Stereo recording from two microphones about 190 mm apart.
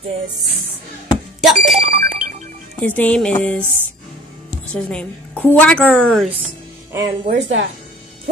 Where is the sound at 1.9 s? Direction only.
35° right (ahead or behind).